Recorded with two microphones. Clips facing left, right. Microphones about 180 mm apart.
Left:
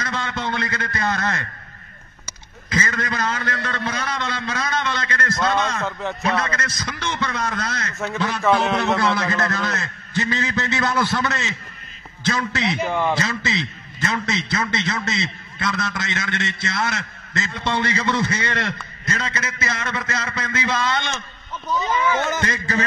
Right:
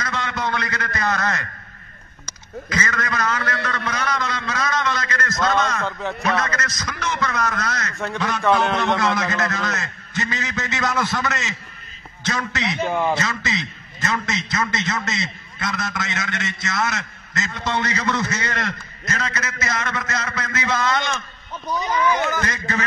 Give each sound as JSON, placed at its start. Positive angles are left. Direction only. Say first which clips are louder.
{"t": 0.0, "sound": "a man's voice", "louder": "right 1 dB", "side_deg": 30}
{"t": 2.7, "sound": "a man's voice", "louder": "left 1 dB", "side_deg": 30}
{"t": 5.9, "sound": "a man's voice", "louder": "even", "side_deg": 0}
{"t": 6.2, "sound": "a man's voice", "louder": "even", "side_deg": 30}
{"t": 8.4, "sound": "a man's voice", "louder": "even", "side_deg": 0}
{"t": 9.1, "sound": "a man's voice", "louder": "left 1 dB", "side_deg": 30}
{"t": 12.7, "sound": "a man's voice", "louder": "even", "side_deg": 5}
{"t": 13.2, "sound": "a man's voice", "louder": "left 1 dB", "side_deg": 30}
{"t": 21.7, "sound": "speech", "louder": "left 2 dB", "side_deg": -10}
{"t": 22.2, "sound": "a man's voice", "louder": "even", "side_deg": 25}